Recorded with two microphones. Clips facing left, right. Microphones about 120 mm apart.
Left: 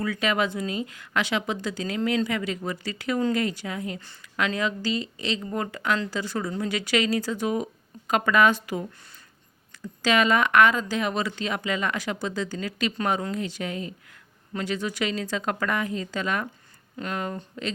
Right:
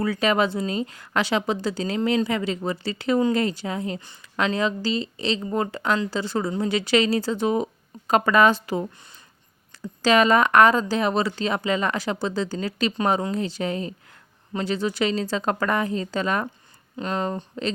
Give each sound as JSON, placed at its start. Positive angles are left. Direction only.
{"t": 0.0, "sound": "a woman's voice", "side_deg": -35}
{"t": 10.0, "sound": "a woman's voice", "side_deg": -35}